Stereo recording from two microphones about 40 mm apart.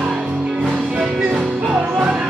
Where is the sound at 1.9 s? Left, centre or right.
Right.